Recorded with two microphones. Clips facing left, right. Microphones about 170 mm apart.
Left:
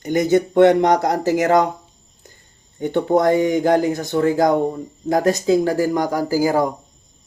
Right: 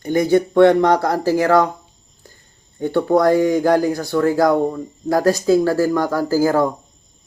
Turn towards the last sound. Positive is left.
turn(degrees=15)  # may be behind; listen again after turning